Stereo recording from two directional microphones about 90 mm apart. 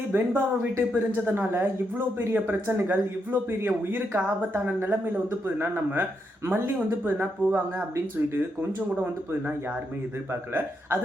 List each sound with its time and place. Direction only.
0.1 s speech: 25° right (ahead or behind)